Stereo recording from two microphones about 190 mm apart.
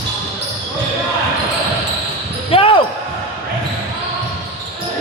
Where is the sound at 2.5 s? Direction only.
30° left (ahead or behind).